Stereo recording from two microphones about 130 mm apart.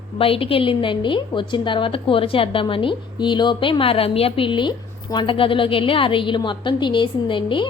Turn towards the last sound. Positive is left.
turn(degrees=40)  # may be behind; listen again after turning